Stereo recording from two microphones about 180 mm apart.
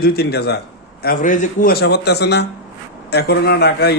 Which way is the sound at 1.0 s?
50° left (ahead or behind).